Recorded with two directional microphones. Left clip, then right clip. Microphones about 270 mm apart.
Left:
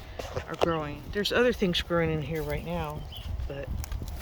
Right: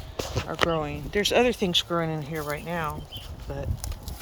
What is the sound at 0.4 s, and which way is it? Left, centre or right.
Speech, centre.